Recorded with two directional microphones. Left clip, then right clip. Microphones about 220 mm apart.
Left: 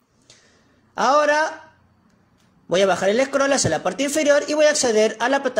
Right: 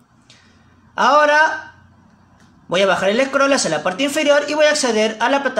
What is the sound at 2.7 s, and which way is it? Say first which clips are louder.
Speech: right 2 dB; 30° left (ahead or behind).